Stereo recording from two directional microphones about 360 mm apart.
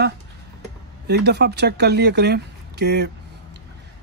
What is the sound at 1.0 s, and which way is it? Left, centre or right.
A man's voice, right.